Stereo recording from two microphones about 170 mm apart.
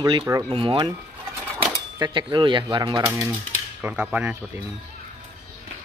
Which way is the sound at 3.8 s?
10° right (ahead or behind).